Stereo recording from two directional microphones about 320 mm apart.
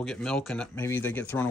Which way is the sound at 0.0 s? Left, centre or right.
Centre.